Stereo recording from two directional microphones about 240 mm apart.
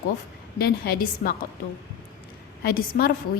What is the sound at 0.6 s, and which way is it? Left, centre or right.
Speech, left.